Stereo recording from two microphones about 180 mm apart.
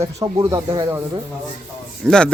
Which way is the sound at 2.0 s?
5° left (ahead or behind).